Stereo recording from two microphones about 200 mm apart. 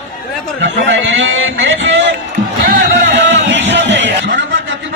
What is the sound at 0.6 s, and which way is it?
A man's voice, 65° right (ahead or behind).